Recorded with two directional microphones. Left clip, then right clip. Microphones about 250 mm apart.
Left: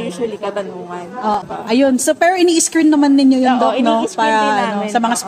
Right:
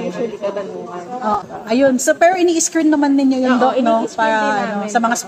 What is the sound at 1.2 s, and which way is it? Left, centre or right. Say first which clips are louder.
A woman's voice: left 2 dB; left.